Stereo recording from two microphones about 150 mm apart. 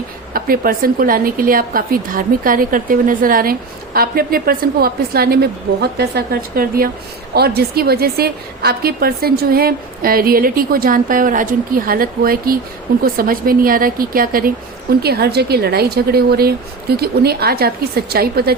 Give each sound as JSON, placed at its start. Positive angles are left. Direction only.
{"t": 0.3, "sound": "a woman's voice", "side_deg": -75}
{"t": 7.3, "sound": "a woman's voice", "side_deg": -90}
{"t": 15.0, "sound": "a woman's voice", "side_deg": -90}